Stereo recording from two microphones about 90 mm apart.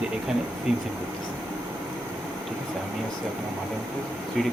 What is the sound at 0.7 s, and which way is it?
Speech, 10° right (ahead or behind).